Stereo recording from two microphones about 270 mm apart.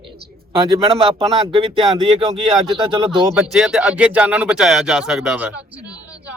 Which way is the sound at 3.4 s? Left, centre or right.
Centre.